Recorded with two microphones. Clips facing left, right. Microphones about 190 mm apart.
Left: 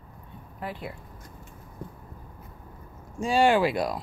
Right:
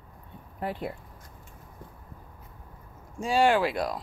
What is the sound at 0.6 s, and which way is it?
Speech, 50° right (ahead or behind).